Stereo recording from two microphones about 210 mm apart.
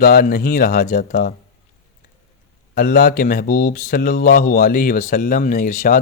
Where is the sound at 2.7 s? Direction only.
40° left (ahead or behind).